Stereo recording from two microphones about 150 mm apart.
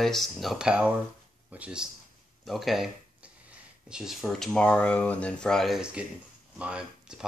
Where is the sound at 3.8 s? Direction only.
5° right (ahead or behind).